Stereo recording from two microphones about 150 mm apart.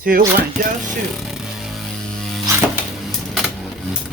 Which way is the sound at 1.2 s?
Centre (ahead or behind).